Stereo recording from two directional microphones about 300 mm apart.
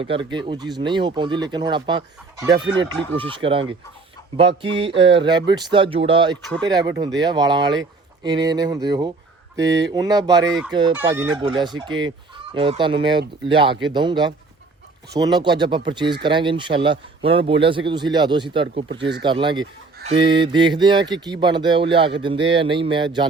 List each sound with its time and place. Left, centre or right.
0.0 s speech: centre